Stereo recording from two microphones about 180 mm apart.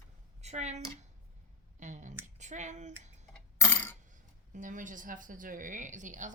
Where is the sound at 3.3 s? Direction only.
10° left (ahead or behind).